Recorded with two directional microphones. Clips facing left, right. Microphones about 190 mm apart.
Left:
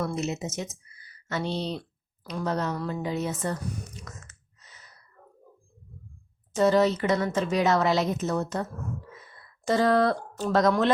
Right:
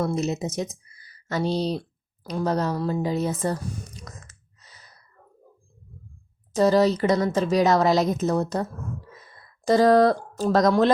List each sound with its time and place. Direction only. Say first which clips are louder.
0.0 s speech: right 4 dB; 35° right (ahead or behind)
2.2 s a sound: right 4 dB; 35° right (ahead or behind)
6.5 s speech: right 3 dB; 35° right (ahead or behind)